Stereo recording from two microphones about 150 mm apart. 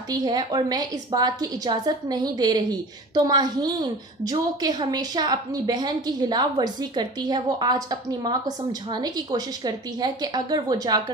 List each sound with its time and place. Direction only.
0.1 s a woman's voice: 30° right (ahead or behind)